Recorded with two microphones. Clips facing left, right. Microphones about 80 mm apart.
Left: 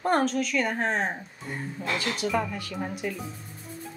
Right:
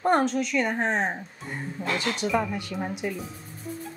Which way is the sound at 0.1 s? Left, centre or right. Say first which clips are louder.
Right 1 dB; centre.